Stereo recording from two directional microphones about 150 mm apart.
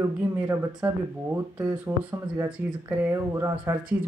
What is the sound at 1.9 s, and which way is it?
Speech, 15° right (ahead or behind).